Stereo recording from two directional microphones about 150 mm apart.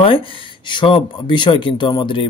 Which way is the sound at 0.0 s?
35° left (ahead or behind).